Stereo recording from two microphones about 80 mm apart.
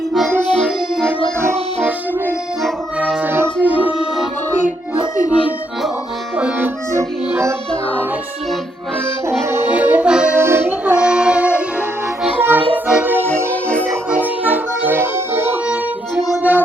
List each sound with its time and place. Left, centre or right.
1.8 s music: right
3.2 s organ: right
6.3 s accordion: right
9.2 s music: right
9.7 s accordion: centre
10.3 s accordion: right
10.9 s child singing: centre
12.4 s music: right
14.1 s accordion: right
16.4 s music: right